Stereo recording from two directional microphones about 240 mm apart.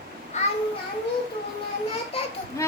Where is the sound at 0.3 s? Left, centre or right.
Left.